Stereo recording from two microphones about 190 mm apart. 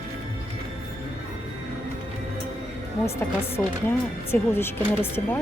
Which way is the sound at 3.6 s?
Centre (ahead or behind).